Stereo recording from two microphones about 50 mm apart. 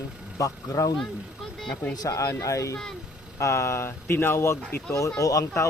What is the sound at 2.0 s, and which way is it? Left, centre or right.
Speech, left.